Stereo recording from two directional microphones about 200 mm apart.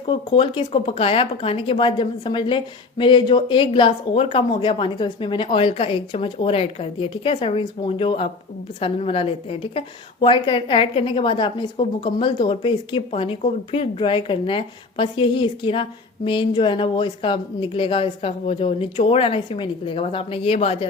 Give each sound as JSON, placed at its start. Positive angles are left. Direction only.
{"t": 0.3, "sound": "a woman's voice", "side_deg": 25}